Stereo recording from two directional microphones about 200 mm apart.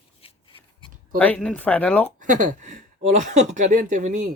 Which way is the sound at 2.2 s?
40° right (ahead or behind).